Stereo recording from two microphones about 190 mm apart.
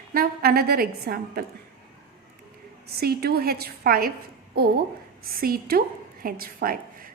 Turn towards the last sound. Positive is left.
turn(degrees=-50)  # may be behind; listen again after turning